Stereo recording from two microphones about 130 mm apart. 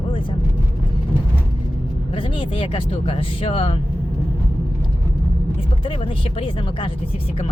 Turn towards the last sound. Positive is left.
turn(degrees=40)  # may be behind; listen again after turning